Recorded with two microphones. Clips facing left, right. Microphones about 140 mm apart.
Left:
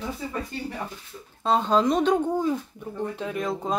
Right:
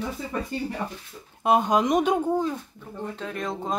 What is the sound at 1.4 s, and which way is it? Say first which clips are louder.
Speech: even; 15° right (ahead or behind).